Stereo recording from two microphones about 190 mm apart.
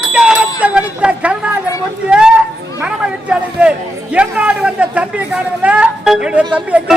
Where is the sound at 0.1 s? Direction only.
5° right (ahead or behind).